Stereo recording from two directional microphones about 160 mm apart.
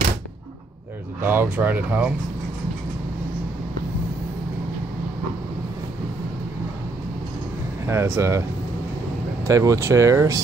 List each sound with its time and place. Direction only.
1.2 s speech: 15° right (ahead or behind)
7.8 s speech: 15° right (ahead or behind)
9.5 s speech: 20° right (ahead or behind)